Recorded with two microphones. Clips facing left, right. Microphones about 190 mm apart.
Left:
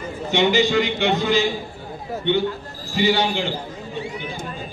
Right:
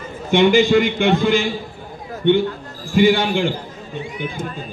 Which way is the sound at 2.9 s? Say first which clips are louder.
Right 5 dB; 50° right (ahead or behind).